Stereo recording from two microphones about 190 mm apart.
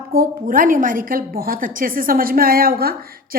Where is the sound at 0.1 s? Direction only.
50° right (ahead or behind).